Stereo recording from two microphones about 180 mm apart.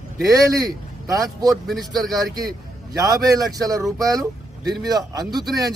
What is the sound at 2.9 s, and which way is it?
A man's voice, 20° right (ahead or behind).